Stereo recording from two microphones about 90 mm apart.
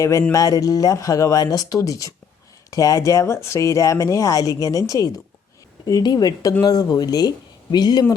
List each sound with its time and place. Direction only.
0.0 s speech: 35° left (ahead or behind)
5.8 s speech: 50° left (ahead or behind)